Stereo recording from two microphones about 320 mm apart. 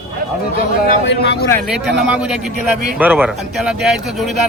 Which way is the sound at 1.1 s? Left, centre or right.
Left.